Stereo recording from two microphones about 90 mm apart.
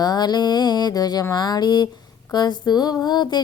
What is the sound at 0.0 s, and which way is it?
Music, 50° left (ahead or behind).